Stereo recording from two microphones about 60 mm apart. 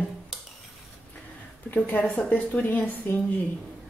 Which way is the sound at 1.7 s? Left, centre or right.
Left.